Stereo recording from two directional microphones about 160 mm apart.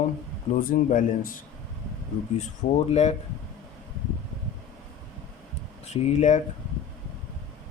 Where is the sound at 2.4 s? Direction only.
45° left (ahead or behind).